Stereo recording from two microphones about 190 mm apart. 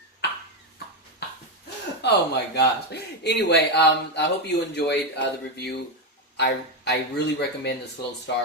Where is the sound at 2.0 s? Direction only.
65° left (ahead or behind).